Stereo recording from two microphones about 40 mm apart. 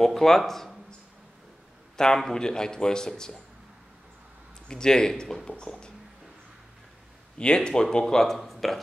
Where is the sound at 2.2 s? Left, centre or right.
Centre.